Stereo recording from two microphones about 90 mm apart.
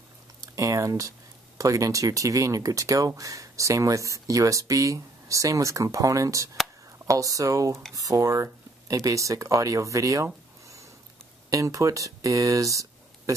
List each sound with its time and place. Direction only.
0.6 s speech: 40° right (ahead or behind)
11.5 s speech: 35° right (ahead or behind)